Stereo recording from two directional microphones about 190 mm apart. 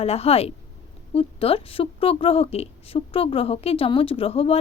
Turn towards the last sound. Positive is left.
turn(degrees=30)  # may be behind; listen again after turning